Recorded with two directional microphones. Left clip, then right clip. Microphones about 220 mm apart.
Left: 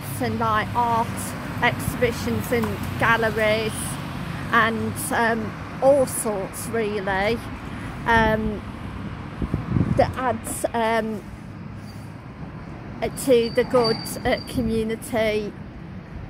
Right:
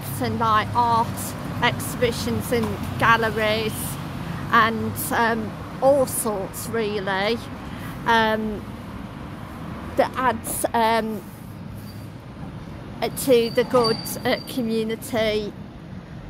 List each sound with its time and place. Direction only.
0.2 s speech: 5° left (ahead or behind)
9.9 s speech: 5° right (ahead or behind)
13.0 s speech: centre (ahead or behind)